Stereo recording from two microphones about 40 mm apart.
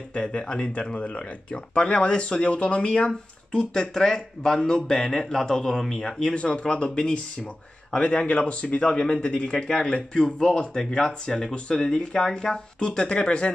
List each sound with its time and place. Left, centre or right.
0.1 s speech: left
3.1 s speech: centre
6.2 s speech: left